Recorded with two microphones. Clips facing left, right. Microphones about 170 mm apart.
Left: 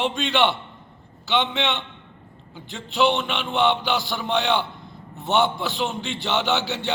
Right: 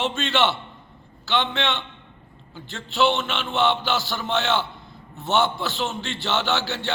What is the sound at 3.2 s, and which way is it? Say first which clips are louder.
Speech: left 1 dB; 15° left (ahead or behind).